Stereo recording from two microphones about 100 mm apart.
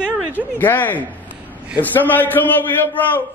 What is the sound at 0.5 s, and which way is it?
A man's voice, 20° left (ahead or behind).